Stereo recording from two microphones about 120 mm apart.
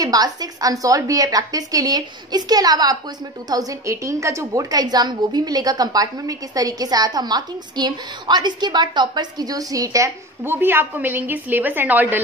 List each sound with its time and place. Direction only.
0.0 s a woman's voice: 30° right (ahead or behind); by 12.2 s 15° right (ahead or behind)